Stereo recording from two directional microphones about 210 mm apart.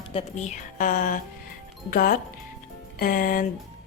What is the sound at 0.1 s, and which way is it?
Speech, 30° left (ahead or behind).